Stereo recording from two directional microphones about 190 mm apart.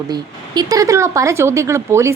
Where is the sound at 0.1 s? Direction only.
20° right (ahead or behind).